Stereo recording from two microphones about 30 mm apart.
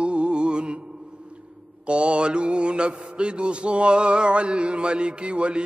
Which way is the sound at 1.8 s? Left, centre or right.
Right.